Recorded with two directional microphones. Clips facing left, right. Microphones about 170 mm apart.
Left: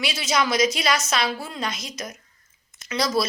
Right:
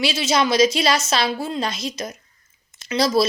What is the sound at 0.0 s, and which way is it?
Speech, 25° right (ahead or behind).